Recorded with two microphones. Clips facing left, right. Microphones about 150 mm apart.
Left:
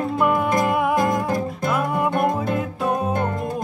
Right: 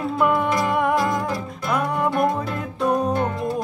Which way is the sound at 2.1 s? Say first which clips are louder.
Left 1 dB; 55° left (ahead or behind).